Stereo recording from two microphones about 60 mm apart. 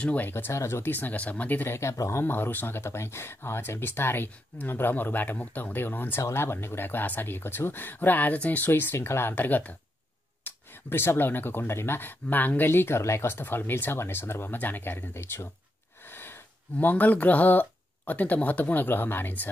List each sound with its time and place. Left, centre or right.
0.0 s speech: left
0.3 s speech: left
0.9 s speech: left
1.6 s speech: left
2.2 s speech: left
10.4 s speech: left
16.1 s a sound: left
16.7 s speech: left